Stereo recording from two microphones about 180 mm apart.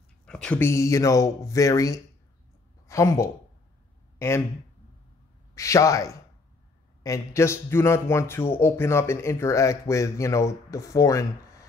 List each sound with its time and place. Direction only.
0.2 s a man's voice: 5° left (ahead or behind)
5.5 s a man's voice: 15° left (ahead or behind)